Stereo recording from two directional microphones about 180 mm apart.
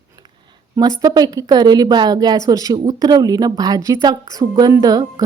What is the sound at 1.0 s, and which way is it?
Speech, 20° right (ahead or behind).